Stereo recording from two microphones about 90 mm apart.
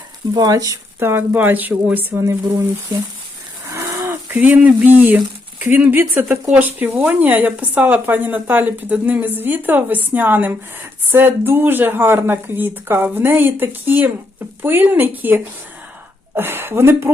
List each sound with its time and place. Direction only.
0.3 s speech: 45° right (ahead or behind)
0.9 s speech: 25° right (ahead or behind)
3.7 s a sound: 35° right (ahead or behind)
4.4 s speech: 15° right (ahead or behind)